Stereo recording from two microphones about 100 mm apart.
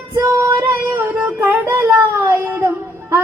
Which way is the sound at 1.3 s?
20° right (ahead or behind).